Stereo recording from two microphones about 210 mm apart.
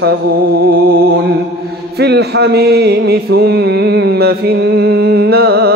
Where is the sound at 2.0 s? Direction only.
50° right (ahead or behind).